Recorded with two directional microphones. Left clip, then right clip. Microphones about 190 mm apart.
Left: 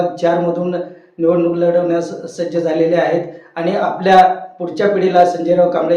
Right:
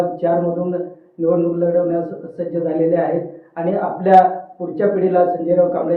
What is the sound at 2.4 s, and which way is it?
Speech, 25° left (ahead or behind).